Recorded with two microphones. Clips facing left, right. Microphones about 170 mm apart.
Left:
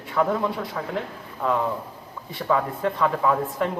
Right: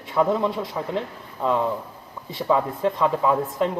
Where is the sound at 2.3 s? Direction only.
20° right (ahead or behind).